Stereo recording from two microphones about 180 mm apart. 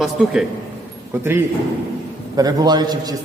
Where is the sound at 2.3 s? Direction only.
20° right (ahead or behind).